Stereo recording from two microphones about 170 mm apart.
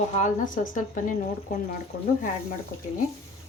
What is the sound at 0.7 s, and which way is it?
Speech, 50° left (ahead or behind).